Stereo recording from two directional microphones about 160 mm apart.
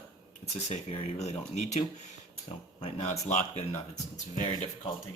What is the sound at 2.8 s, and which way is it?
Speech, 45° left (ahead or behind).